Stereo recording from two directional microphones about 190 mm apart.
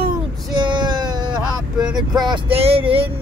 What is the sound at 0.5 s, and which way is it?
Child singing, 25° right (ahead or behind).